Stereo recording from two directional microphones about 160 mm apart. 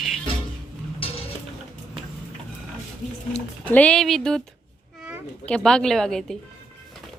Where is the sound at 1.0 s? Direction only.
35° left (ahead or behind).